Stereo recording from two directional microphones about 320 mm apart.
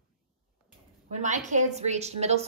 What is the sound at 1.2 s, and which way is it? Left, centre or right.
A woman's voice, right.